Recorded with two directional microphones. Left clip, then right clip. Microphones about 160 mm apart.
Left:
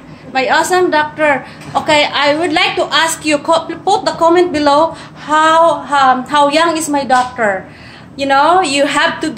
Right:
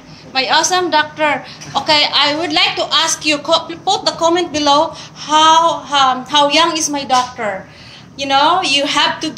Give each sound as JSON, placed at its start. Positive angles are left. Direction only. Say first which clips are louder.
{"t": 0.3, "sound": "a woman's voice", "louder": "left 2 dB", "side_deg": 20}